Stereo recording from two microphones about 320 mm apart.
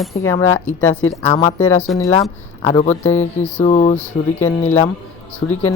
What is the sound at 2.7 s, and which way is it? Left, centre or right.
Speech, left.